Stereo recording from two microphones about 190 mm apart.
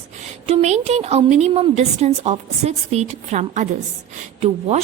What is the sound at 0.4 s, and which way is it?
Speech, 35° right (ahead or behind).